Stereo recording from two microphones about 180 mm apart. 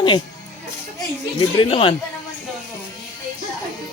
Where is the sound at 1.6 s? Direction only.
30° left (ahead or behind).